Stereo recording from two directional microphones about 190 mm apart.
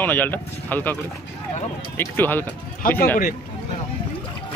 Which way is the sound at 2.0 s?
10° left (ahead or behind).